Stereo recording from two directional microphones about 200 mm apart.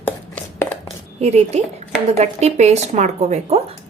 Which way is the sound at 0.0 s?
10° left (ahead or behind).